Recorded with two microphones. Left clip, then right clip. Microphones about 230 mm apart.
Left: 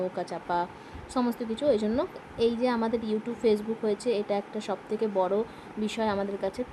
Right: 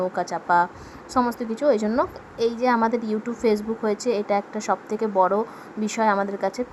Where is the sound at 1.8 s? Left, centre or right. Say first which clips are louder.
Right 6 dB; centre.